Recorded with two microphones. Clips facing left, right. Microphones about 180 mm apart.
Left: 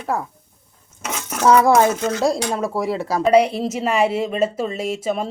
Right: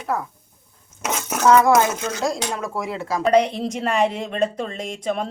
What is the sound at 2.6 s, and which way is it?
Speech, 35° left (ahead or behind).